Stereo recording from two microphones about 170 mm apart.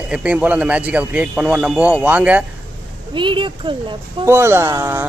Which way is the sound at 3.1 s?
30° right (ahead or behind).